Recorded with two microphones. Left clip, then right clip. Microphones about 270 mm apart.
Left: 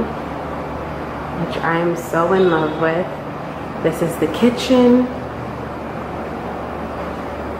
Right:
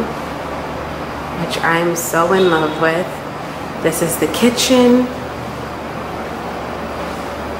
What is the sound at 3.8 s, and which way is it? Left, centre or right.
Speech, centre.